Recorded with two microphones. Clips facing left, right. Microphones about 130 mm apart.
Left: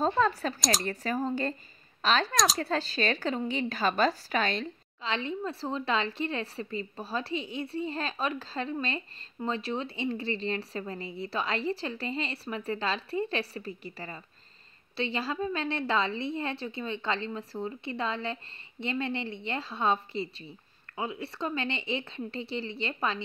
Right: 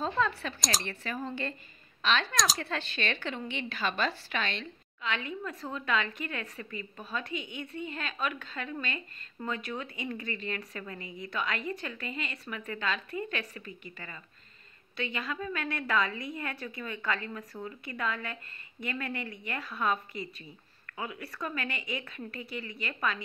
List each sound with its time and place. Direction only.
0.0 s a woman's voice: 40° left (ahead or behind)
0.6 s speech: centre (ahead or behind)
0.8 s a woman's voice: 40° left (ahead or behind)